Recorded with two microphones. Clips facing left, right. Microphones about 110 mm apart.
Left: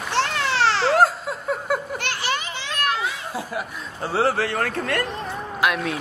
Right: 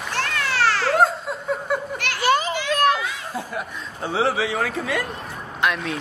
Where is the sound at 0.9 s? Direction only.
Centre (ahead or behind).